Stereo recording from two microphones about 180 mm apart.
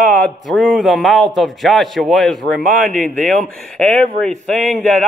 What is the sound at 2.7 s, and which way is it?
Speech, 50° right (ahead or behind).